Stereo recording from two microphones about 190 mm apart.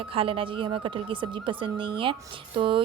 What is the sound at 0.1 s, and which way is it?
A woman's voice, 30° right (ahead or behind).